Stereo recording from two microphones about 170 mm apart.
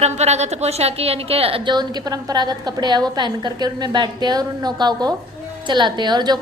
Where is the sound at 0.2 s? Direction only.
40° right (ahead or behind).